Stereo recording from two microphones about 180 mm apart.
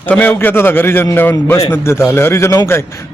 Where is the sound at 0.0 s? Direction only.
10° left (ahead or behind).